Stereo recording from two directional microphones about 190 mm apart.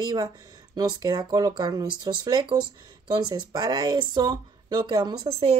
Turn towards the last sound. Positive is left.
turn(degrees=-25)  # may be behind; listen again after turning